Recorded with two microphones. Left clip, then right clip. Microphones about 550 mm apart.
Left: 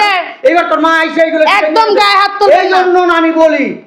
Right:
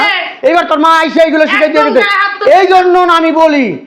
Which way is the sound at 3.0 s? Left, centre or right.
Right.